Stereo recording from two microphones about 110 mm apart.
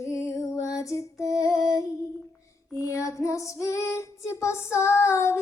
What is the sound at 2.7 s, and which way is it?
Female singing, 30° left (ahead or behind).